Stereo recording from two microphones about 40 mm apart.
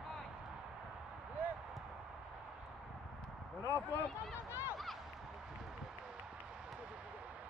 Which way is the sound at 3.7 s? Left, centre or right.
Left.